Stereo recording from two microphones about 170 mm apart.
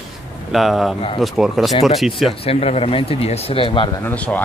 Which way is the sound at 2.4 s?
35° left (ahead or behind).